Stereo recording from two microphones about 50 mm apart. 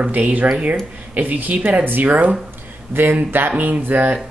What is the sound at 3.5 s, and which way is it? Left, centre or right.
Speech, right.